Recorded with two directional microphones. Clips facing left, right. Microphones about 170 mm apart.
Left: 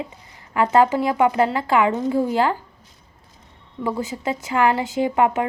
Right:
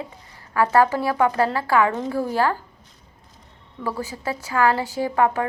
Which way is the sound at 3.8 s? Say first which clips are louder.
Left 3 dB; 20° left (ahead or behind).